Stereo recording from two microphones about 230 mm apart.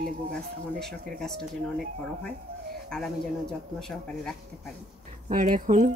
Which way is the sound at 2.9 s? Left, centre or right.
Centre.